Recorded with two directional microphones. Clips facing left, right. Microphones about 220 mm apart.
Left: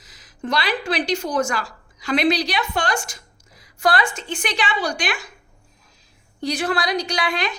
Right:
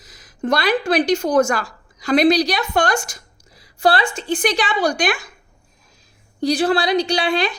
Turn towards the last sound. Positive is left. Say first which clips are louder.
# right 5 dB
turn(degrees=-30)  # may be behind; listen again after turning